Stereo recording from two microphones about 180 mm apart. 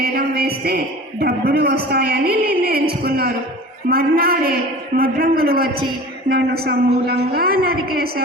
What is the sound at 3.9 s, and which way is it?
A woman's voice, 60° right (ahead or behind).